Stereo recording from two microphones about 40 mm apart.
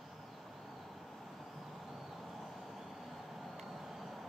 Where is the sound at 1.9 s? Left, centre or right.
Centre.